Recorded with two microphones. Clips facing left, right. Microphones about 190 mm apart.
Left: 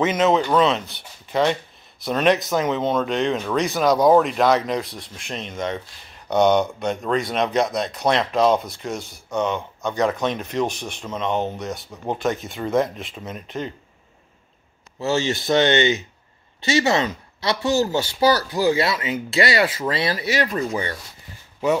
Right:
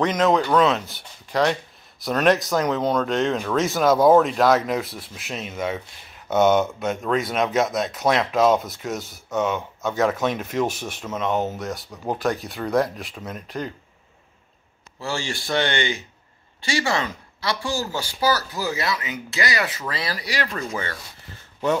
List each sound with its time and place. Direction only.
0.0 s speech: 5° left (ahead or behind)
15.0 s speech: 20° left (ahead or behind)